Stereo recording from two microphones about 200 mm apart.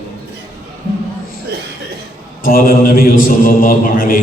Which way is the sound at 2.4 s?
45° left (ahead or behind).